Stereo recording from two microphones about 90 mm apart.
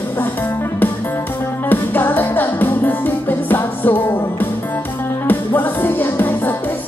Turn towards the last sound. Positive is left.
turn(degrees=20)  # may be behind; listen again after turning